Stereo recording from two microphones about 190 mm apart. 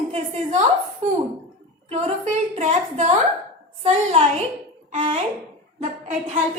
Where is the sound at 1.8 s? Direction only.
35° right (ahead or behind).